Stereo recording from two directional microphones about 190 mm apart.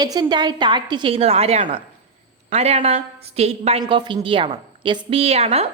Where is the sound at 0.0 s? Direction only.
20° right (ahead or behind).